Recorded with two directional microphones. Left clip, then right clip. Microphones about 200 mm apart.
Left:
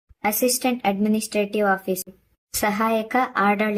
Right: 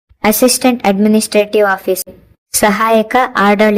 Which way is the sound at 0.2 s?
40° right (ahead or behind).